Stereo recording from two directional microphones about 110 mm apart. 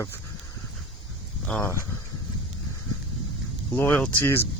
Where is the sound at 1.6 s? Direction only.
25° left (ahead or behind).